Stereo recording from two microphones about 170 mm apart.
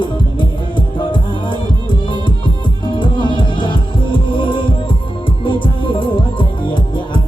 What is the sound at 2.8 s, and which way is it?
Music, 30° left (ahead or behind).